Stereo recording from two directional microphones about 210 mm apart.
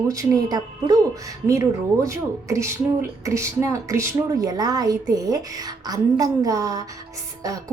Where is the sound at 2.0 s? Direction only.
15° right (ahead or behind).